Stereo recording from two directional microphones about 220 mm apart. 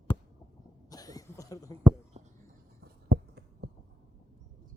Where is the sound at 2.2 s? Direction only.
30° right (ahead or behind).